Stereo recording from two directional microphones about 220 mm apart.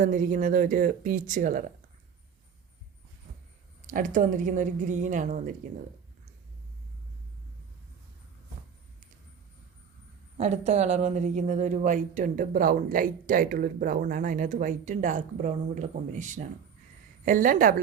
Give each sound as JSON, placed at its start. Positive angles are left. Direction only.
{"t": 0.0, "sound": "speech", "side_deg": -35}
{"t": 3.8, "sound": "speech", "side_deg": -35}
{"t": 10.3, "sound": "speech", "side_deg": -30}